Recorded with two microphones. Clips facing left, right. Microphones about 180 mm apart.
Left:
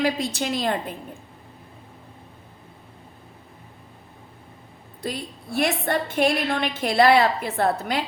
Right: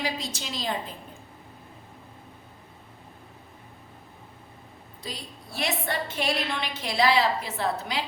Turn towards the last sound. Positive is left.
turn(degrees=55)  # may be behind; listen again after turning